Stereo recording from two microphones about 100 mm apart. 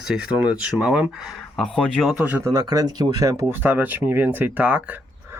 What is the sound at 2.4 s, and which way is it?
Speech, 40° right (ahead or behind).